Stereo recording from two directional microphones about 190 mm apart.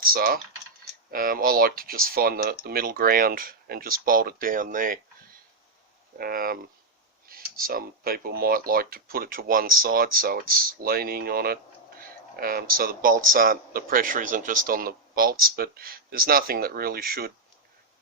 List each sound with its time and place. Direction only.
0.0 s speech: 50° right (ahead or behind)
6.1 s speech: 50° right (ahead or behind)